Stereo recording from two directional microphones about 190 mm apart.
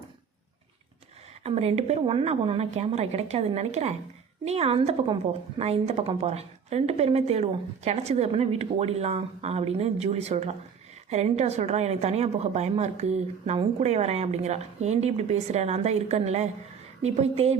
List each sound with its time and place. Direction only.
1.5 s a woman's voice: 35° right (ahead or behind)